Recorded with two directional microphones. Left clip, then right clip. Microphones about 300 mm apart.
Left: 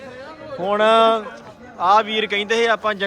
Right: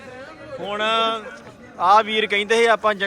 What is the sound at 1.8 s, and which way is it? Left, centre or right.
A man's voice, centre.